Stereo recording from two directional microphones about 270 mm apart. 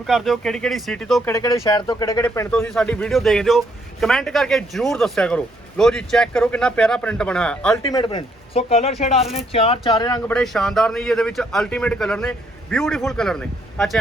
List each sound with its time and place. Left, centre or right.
0.1 s speech: centre
7.9 s speech: centre